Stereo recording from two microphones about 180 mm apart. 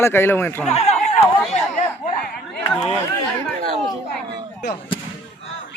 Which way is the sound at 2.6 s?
10° left (ahead or behind).